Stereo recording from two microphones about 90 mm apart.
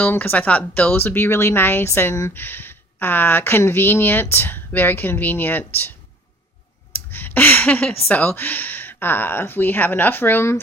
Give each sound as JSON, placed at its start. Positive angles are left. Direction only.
{"t": 0.0, "sound": "speech", "side_deg": 20}
{"t": 6.9, "sound": "speech", "side_deg": 20}